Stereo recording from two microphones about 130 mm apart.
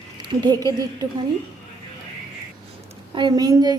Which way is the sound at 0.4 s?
30° right (ahead or behind).